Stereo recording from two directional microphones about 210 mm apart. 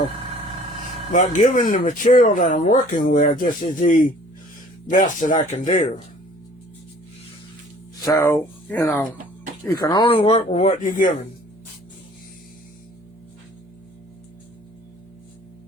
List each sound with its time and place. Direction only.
1.1 s speech: 35° left (ahead or behind)
8.0 s speech: 15° left (ahead or behind); by 11.1 s 35° left (ahead or behind)